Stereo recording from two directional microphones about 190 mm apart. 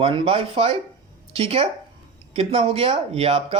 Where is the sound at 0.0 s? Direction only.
30° right (ahead or behind).